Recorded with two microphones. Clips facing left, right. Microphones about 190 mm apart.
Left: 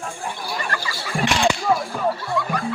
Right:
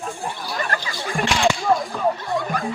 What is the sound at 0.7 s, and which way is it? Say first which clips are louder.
Speech: right 2 dB; 50° right (ahead or behind).